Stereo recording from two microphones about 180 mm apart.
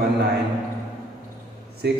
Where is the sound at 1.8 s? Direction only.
65° right (ahead or behind).